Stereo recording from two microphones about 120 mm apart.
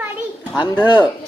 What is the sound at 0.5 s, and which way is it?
Speech, 35° left (ahead or behind).